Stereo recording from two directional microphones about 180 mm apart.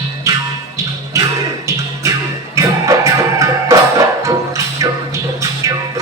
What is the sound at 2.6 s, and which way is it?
Music, 15° right (ahead or behind).